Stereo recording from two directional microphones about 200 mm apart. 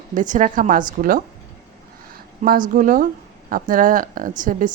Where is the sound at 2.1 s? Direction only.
45° right (ahead or behind).